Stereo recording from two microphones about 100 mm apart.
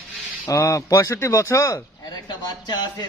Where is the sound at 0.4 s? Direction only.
35° left (ahead or behind).